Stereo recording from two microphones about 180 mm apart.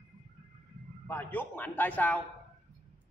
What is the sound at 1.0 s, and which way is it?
A man's voice, 10° left (ahead or behind).